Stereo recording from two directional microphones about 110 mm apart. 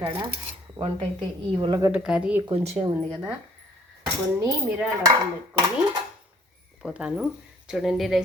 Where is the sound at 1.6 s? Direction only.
45° right (ahead or behind).